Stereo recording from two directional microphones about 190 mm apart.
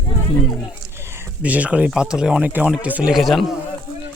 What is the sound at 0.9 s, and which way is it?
Speech, 15° right (ahead or behind).